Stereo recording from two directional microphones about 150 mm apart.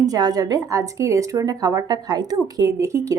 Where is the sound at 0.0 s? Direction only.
25° right (ahead or behind).